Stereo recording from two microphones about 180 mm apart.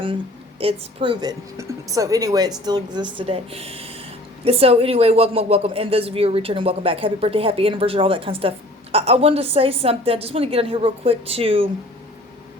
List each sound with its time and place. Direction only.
0.6 s speech: 30° right (ahead or behind)